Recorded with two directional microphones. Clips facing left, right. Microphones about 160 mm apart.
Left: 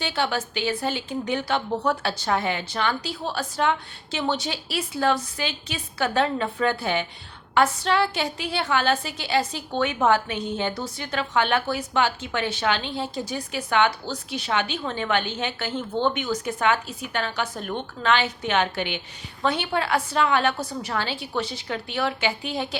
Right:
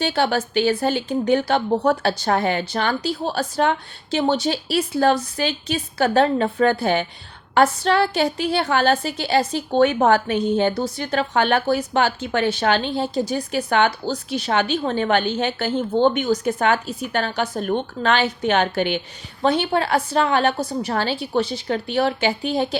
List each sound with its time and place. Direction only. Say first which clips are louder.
0.0 s a woman's voice: right 6 dB; 40° right (ahead or behind)